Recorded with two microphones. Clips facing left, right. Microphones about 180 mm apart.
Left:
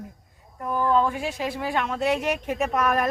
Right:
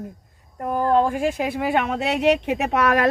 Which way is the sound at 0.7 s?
50° right (ahead or behind).